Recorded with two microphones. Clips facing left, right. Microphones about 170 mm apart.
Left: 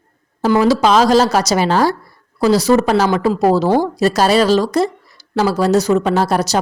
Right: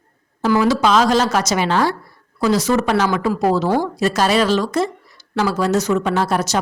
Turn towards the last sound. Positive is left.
turn(degrees=35)  # may be behind; listen again after turning